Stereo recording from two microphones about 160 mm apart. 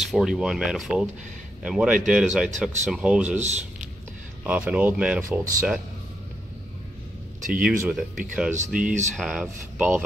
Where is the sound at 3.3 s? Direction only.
45° right (ahead or behind).